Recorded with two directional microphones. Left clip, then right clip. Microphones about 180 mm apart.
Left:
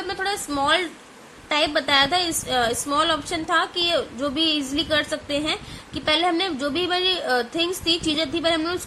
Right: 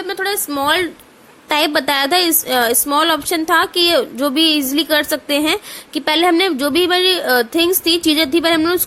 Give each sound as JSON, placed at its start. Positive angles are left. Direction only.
{"t": 0.1, "sound": "a woman's voice", "side_deg": -45}